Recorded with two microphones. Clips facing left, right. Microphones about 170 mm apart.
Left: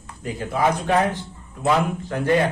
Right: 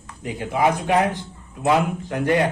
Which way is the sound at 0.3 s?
15° right (ahead or behind).